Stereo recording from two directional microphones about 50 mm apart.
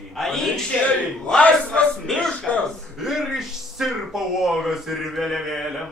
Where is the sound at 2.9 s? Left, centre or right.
Centre.